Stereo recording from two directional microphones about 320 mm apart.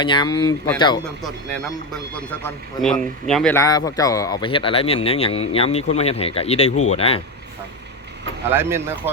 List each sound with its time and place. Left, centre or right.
0.0 s speech: centre
1.2 s speech: centre
6.7 s speech: left
6.9 s speech: centre